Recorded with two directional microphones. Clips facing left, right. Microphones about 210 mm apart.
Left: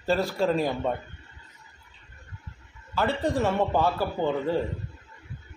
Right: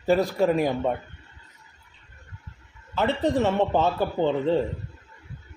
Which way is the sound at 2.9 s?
20° right (ahead or behind).